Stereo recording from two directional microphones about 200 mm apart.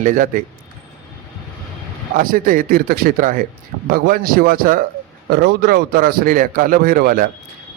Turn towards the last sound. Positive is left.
turn(degrees=-45)  # may be behind; listen again after turning